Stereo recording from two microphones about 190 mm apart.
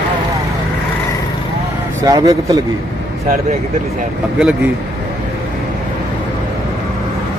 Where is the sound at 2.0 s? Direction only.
20° right (ahead or behind).